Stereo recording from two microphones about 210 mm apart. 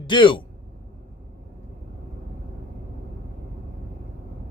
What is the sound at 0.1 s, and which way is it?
Speech, 25° left (ahead or behind).